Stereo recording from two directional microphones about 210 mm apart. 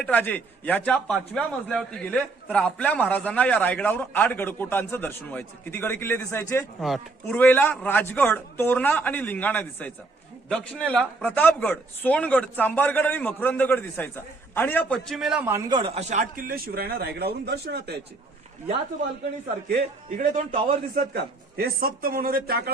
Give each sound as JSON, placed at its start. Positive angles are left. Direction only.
{"t": 0.0, "sound": "a man's voice", "side_deg": 10}
{"t": 6.8, "sound": "a man's voice", "side_deg": 0}
{"t": 15.7, "sound": "a man's voice", "side_deg": -25}
{"t": 20.1, "sound": "a man's voice", "side_deg": -40}